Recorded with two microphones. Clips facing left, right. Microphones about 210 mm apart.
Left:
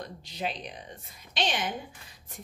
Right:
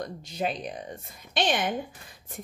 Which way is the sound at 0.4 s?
50° right (ahead or behind).